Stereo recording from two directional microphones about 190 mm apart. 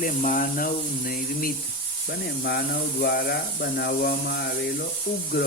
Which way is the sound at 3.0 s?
55° left (ahead or behind).